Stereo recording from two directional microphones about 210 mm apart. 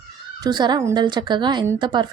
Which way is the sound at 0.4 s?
20° right (ahead or behind).